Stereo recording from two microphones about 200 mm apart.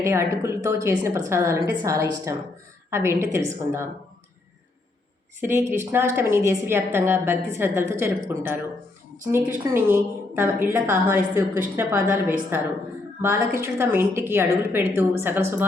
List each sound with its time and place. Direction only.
0.0 s a woman's voice: 15° right (ahead or behind)
5.4 s a woman's voice: 10° right (ahead or behind)
13.2 s a woman's voice: 15° right (ahead or behind)